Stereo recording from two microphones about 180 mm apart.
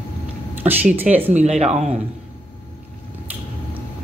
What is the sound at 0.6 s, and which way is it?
Speech, 10° right (ahead or behind).